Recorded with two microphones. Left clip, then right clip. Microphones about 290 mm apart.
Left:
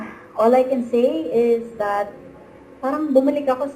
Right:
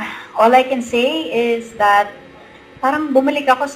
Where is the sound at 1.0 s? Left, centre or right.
Right.